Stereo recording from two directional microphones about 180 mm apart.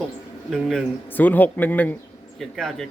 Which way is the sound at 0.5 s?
Centre (ahead or behind).